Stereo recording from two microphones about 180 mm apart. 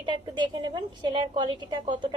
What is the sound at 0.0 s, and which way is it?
A woman's voice, 25° right (ahead or behind).